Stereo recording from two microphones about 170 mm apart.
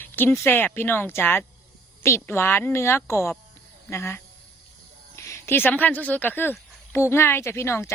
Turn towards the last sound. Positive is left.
turn(degrees=15)  # may be behind; listen again after turning